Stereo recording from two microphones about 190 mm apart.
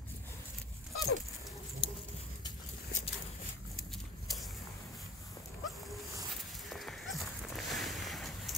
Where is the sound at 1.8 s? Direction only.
25° left (ahead or behind).